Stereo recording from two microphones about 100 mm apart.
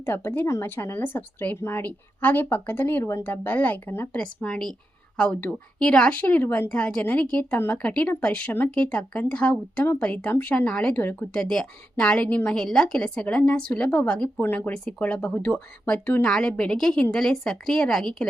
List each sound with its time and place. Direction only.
0.0 s speech: 25° left (ahead or behind); by 18.3 s 5° left (ahead or behind)